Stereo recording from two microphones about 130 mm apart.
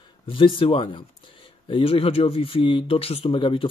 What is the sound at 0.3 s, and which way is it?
Speech, 40° left (ahead or behind).